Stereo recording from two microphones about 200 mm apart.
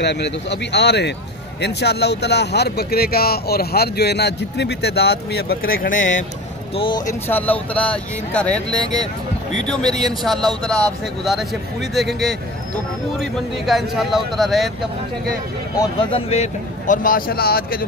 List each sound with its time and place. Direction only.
0.0 s speech: 60° left (ahead or behind)
5.9 s speech: 70° left (ahead or behind)
6.7 s speech: 25° left (ahead or behind)
7.1 s speech: 10° left (ahead or behind)
16.0 s speech: 25° left (ahead or behind); by 17.8 s 50° left (ahead or behind)